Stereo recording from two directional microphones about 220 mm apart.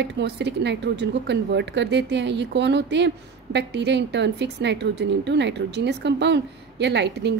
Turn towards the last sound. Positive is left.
turn(degrees=-50)  # may be behind; listen again after turning